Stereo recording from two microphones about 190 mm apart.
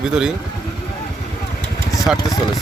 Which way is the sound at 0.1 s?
5° right (ahead or behind).